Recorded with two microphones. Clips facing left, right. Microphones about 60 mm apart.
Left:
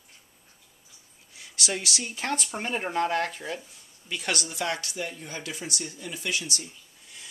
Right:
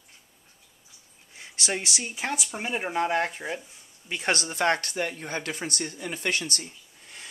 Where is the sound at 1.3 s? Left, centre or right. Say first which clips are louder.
Right 1 dB; right.